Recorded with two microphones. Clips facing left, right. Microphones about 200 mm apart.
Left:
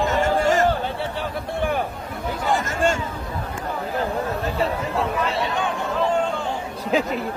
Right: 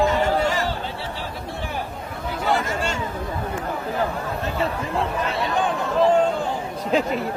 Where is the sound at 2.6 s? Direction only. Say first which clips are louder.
Left 4 dB; 50° left (ahead or behind).